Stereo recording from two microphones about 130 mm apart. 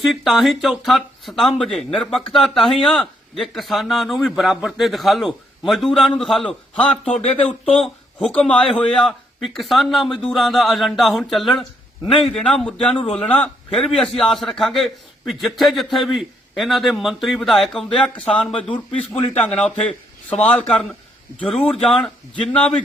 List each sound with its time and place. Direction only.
0.0 s speech: centre (ahead or behind)
7.2 s speech: 50° left (ahead or behind)
7.8 s speech: 5° left (ahead or behind)
12.9 s speech: 45° left (ahead or behind)
13.1 s a man's voice: 10° left (ahead or behind)
18.1 s speech: 40° left (ahead or behind)
19.3 s a man's voice: 10° left (ahead or behind)